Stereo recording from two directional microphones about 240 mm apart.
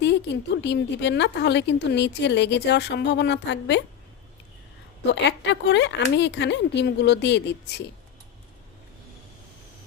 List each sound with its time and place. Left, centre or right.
0.6 s speech: left
5.1 s speech: left